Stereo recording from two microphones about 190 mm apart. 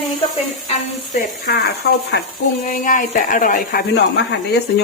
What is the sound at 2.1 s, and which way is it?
Speech, 65° left (ahead or behind).